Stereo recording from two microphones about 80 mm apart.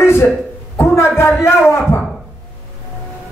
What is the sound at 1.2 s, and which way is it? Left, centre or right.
Speech, left.